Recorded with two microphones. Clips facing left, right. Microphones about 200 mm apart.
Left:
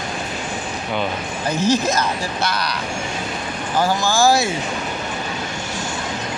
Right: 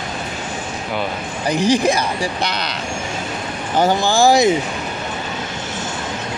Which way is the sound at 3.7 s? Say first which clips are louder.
Right 3 dB; 20° right (ahead or behind).